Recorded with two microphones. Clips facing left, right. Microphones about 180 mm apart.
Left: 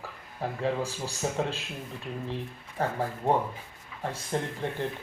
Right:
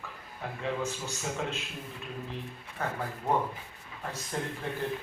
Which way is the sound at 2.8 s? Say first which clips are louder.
Left 5 dB; 30° left (ahead or behind).